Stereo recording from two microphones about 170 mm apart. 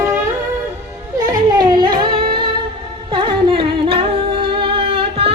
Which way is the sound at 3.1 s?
30° right (ahead or behind).